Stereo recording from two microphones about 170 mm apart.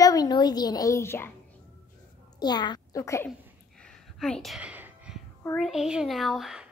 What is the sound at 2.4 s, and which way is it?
Speech, 25° left (ahead or behind).